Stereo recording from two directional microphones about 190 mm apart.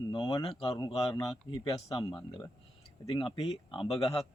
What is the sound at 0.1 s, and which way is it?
Speech, 25° left (ahead or behind).